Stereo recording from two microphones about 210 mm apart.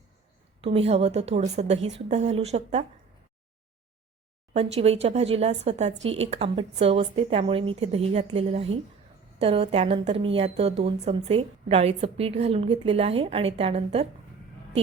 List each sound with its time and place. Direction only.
0.6 s a woman's voice: 30° right (ahead or behind)
4.5 s a woman's voice: 30° right (ahead or behind)